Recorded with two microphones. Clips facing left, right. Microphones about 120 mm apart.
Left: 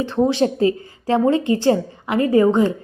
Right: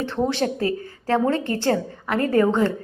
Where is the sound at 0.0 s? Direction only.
15° left (ahead or behind).